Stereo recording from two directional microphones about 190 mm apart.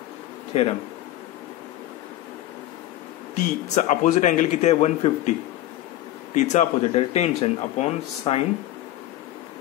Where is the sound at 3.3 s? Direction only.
40° left (ahead or behind).